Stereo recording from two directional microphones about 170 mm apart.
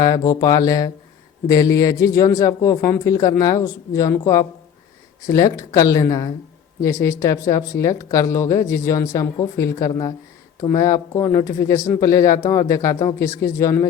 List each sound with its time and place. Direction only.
0.0 s speech: 20° left (ahead or behind)